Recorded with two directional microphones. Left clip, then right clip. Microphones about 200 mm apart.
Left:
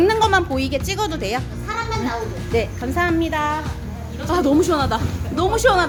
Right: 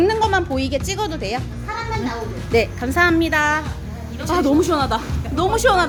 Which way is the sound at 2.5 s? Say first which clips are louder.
Right 4 dB; 25° right (ahead or behind).